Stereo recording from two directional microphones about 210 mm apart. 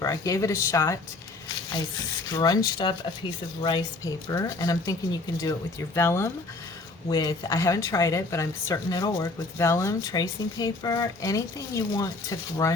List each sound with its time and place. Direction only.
0.0 s a woman's voice: 15° left (ahead or behind)
2.3 s a woman's voice: 15° left (ahead or behind)